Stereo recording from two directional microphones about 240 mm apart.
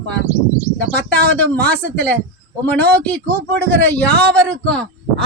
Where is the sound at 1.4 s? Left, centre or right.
Centre.